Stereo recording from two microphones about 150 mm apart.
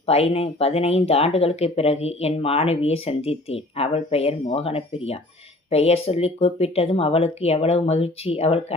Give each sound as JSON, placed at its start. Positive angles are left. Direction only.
{"t": 0.0, "sound": "speech", "side_deg": 40}